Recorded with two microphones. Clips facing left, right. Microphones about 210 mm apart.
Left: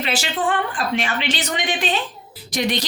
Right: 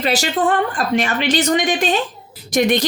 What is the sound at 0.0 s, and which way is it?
Speech, 40° right (ahead or behind).